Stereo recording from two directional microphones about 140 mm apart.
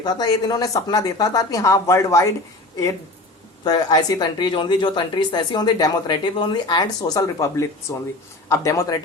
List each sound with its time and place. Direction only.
0.0 s a woman's voice: 30° left (ahead or behind)
3.6 s a woman's voice: 30° left (ahead or behind)